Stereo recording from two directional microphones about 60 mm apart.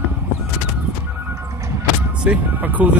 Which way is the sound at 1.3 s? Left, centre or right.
Right.